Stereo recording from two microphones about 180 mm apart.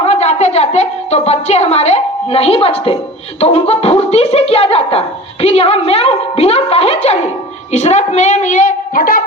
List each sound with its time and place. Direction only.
0.0 s a woman's voice: 40° left (ahead or behind)